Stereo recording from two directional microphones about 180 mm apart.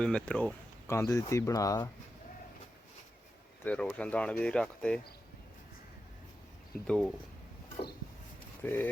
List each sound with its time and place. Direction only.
0.0 s speech: 5° left (ahead or behind)
0.9 s speech: 15° left (ahead or behind)
3.6 s speech: 5° left (ahead or behind)
6.8 s speech: 5° left (ahead or behind)
8.6 s speech: 10° left (ahead or behind)